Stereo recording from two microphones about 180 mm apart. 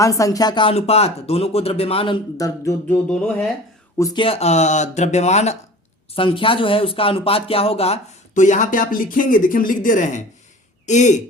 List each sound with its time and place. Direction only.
0.0 s speech: 20° left (ahead or behind)
2.4 s speech: 10° left (ahead or behind)
3.9 s speech: 20° left (ahead or behind)
4.2 s speech: 35° left (ahead or behind)